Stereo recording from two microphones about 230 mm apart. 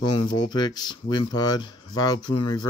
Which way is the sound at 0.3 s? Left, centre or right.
Centre.